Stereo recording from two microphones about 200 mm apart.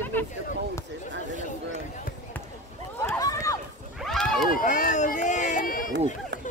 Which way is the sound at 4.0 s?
Centre (ahead or behind).